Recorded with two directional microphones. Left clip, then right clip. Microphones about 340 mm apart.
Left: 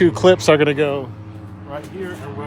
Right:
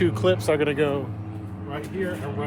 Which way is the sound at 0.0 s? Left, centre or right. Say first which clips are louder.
Left 9 dB; centre.